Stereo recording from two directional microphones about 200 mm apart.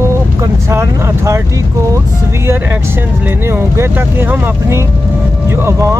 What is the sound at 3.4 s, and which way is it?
Speech, 15° right (ahead or behind).